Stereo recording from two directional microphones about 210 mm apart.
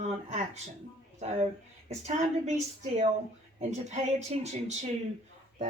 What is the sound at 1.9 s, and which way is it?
Speech, 35° right (ahead or behind).